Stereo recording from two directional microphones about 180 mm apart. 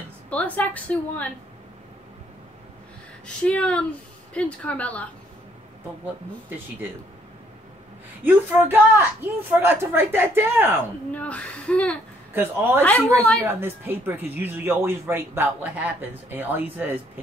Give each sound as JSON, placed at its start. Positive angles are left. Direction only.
{"t": 0.3, "sound": "a woman's voice", "side_deg": 10}
{"t": 3.3, "sound": "a woman's voice", "side_deg": 5}
{"t": 8.2, "sound": "speech", "side_deg": -10}
{"t": 11.1, "sound": "a woman's voice", "side_deg": 5}
{"t": 12.4, "sound": "speech", "side_deg": -10}